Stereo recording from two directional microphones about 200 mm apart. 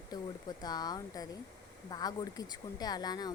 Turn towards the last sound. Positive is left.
turn(degrees=20)  # may be behind; listen again after turning